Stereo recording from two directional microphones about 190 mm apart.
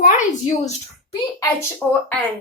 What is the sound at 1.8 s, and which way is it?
Speech, 10° left (ahead or behind).